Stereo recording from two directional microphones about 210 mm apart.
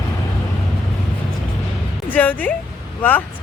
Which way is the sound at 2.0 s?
10° left (ahead or behind).